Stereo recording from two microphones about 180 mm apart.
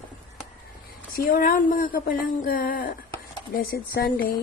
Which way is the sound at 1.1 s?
50° left (ahead or behind).